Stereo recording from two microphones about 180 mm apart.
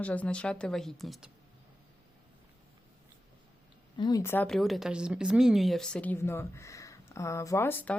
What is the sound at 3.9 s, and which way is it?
Speech, 25° left (ahead or behind).